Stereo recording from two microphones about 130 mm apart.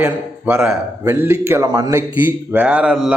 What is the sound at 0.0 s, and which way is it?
A man's voice, 10° right (ahead or behind).